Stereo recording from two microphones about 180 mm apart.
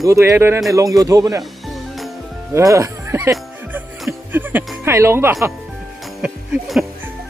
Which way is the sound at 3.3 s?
5° right (ahead or behind).